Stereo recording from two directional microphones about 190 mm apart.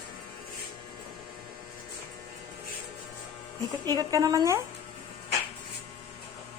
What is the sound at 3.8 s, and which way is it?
Speech, 20° right (ahead or behind).